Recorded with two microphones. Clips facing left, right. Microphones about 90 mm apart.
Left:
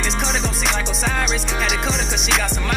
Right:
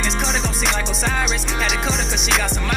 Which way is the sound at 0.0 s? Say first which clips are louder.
Even; centre (ahead or behind).